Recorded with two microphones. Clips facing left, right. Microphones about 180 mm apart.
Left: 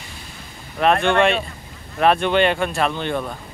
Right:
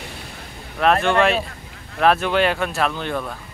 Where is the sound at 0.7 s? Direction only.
Centre (ahead or behind).